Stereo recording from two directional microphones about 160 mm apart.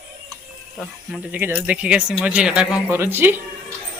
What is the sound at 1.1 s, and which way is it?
Speech, 10° right (ahead or behind).